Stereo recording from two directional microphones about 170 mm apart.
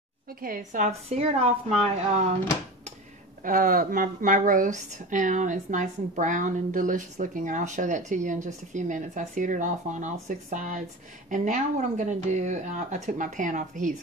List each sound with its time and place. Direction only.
0.3 s a woman's voice: 60° right (ahead or behind); by 1.5 s 35° right (ahead or behind)
3.4 s a woman's voice: 55° right (ahead or behind)